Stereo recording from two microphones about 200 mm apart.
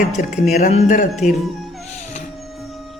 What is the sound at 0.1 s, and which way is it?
Speech, 40° left (ahead or behind).